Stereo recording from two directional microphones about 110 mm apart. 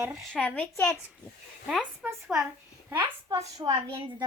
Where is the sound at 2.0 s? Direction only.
15° right (ahead or behind).